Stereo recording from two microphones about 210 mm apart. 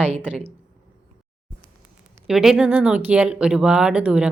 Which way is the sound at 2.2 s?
Centre (ahead or behind).